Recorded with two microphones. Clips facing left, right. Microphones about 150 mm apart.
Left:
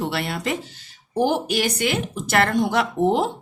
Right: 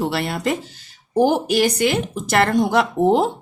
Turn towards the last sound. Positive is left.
turn(degrees=-40)  # may be behind; listen again after turning